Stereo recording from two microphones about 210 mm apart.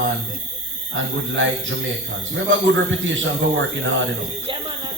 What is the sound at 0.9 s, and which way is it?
A man's voice, 60° right (ahead or behind).